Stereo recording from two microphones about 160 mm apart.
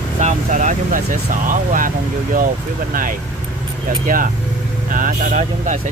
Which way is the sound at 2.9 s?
60° right (ahead or behind).